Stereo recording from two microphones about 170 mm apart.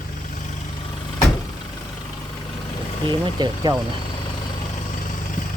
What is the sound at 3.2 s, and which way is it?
Speech, 25° right (ahead or behind).